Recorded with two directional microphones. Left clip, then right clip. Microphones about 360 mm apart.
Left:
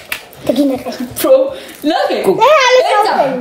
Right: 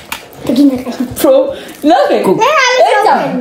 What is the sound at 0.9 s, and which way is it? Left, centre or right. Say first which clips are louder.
A woman's voice: right 1 dB; centre.